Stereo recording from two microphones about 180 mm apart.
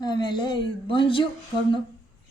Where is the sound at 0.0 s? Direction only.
25° left (ahead or behind).